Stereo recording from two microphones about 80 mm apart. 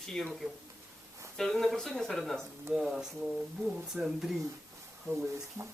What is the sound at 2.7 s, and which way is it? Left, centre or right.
Speech, centre.